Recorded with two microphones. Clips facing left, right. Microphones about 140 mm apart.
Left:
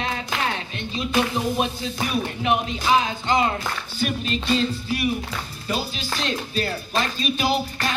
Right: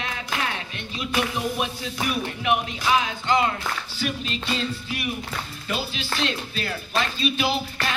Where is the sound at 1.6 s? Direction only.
30° left (ahead or behind).